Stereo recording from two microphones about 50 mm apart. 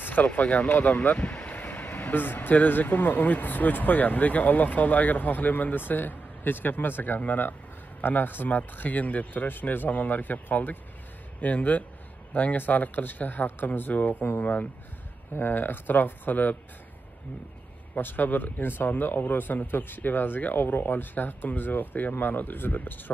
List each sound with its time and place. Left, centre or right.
0.0 s speech: left
15.3 s speech: left
17.9 s speech: left